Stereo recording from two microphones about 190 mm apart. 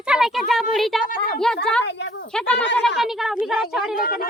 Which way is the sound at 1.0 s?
45° left (ahead or behind).